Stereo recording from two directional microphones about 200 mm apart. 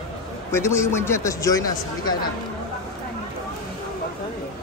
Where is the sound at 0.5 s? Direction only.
15° left (ahead or behind).